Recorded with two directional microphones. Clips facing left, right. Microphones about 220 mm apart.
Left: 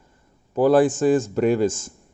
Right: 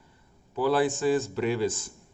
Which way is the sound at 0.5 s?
45° left (ahead or behind).